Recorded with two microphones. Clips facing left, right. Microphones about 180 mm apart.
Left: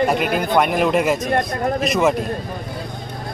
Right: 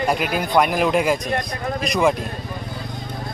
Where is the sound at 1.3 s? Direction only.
50° left (ahead or behind).